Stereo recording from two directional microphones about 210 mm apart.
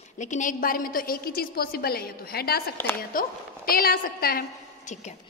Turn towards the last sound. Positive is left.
turn(degrees=45)  # may be behind; listen again after turning